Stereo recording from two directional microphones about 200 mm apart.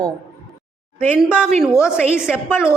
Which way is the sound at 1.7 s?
15° left (ahead or behind).